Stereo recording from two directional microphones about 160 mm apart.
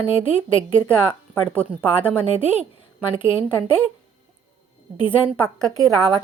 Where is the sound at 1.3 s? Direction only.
5° left (ahead or behind).